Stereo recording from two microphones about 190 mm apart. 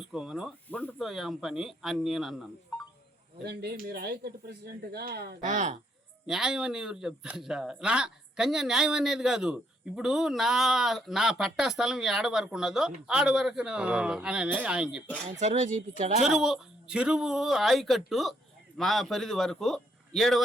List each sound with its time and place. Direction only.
0.0 s speech: centre (ahead or behind)
3.4 s speech: 55° right (ahead or behind)
6.2 s speech: 5° right (ahead or behind)
15.4 s speech: 40° right (ahead or behind)
16.2 s speech: centre (ahead or behind)